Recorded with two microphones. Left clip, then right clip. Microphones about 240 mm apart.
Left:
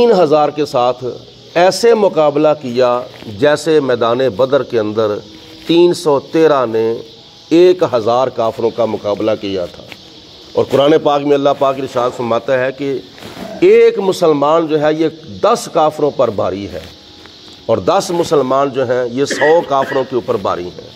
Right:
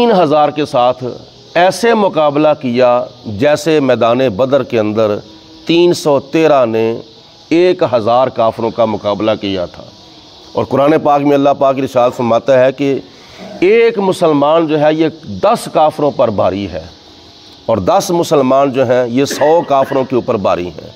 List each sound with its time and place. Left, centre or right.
0.0 s a man's voice: right
13.6 s a man's voice: right